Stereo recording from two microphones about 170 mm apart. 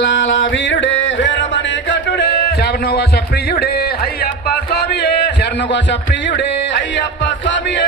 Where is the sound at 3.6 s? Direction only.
70° left (ahead or behind); by 7.8 s 90° left.